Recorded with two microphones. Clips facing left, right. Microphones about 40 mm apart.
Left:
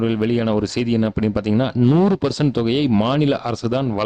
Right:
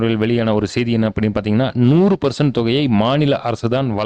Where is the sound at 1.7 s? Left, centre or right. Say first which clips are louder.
Right 3 dB; right.